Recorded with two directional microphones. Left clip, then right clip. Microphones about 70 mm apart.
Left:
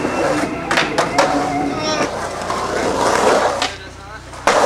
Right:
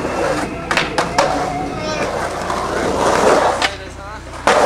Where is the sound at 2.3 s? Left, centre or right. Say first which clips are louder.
Right 1 dB; centre.